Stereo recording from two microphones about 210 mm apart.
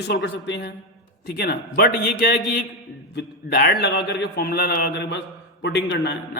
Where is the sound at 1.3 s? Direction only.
45° left (ahead or behind).